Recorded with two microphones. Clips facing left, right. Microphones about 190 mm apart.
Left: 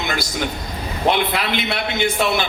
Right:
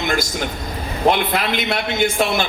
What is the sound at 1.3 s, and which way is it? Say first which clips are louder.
A man's voice: right 2 dB; 45° right (ahead or behind).